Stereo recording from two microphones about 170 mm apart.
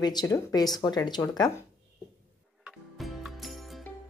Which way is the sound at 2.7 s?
Centre (ahead or behind).